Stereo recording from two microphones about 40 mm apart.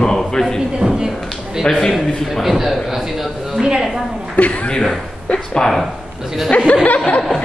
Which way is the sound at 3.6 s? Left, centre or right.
Centre.